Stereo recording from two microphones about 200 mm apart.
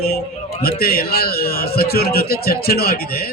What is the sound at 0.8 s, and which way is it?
A man's voice, 50° left (ahead or behind).